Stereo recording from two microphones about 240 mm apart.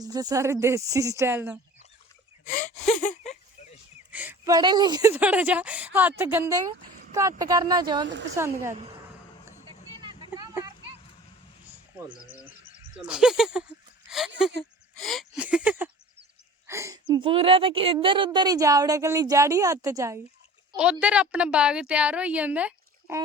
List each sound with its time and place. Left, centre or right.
0.0 s a woman's voice: centre
2.4 s gasp: left
4.1 s a woman's voice: centre
10.3 s a sound: centre
11.9 s a woman's voice: centre